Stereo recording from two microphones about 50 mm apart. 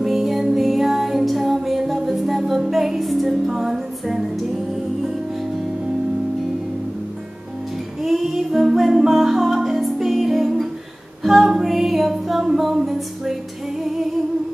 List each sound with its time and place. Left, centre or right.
0.0 s music: centre
8.0 s music: centre